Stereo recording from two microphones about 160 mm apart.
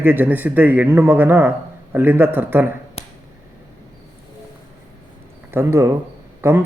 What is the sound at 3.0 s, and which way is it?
Finger snapping, 40° left (ahead or behind).